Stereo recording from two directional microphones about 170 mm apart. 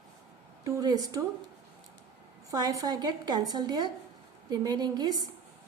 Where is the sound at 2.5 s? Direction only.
20° right (ahead or behind).